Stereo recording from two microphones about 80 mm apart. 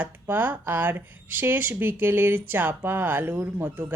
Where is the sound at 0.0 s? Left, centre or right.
Right.